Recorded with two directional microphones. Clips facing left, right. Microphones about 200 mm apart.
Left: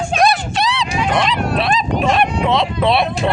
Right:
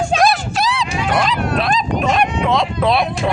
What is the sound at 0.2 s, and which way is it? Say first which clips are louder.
Dog: even; centre (ahead or behind).